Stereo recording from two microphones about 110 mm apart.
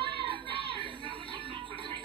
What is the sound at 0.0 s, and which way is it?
Music, 50° right (ahead or behind).